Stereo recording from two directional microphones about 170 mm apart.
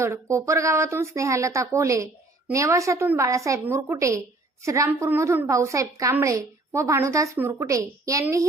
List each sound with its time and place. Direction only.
0.0 s a woman's voice: 15° right (ahead or behind)